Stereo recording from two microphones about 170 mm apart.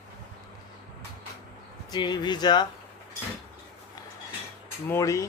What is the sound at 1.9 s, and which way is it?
Speech, 25° left (ahead or behind).